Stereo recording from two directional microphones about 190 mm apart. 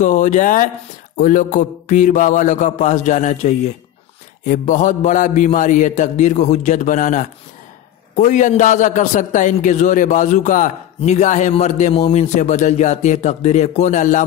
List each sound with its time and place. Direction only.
0.0 s a man's voice: 40° left (ahead or behind)